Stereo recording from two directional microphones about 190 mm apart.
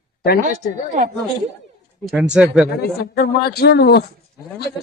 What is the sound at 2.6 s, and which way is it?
Speech, 55° left (ahead or behind).